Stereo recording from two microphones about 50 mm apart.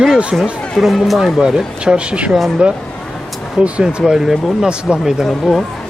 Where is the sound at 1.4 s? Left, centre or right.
Centre.